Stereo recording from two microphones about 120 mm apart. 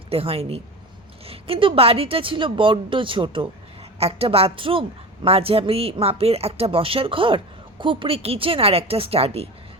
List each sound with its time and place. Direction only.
0.1 s a woman's voice: 55° right (ahead or behind)